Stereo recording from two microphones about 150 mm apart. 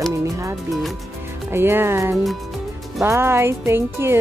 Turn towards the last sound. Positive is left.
turn(degrees=-15)  # may be behind; listen again after turning